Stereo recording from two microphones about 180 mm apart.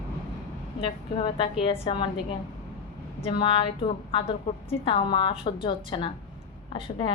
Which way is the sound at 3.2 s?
30° left (ahead or behind).